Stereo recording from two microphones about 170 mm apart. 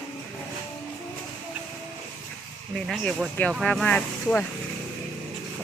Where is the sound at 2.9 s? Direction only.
Centre (ahead or behind).